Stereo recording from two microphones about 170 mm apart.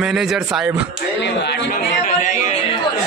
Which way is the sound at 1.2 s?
85° left.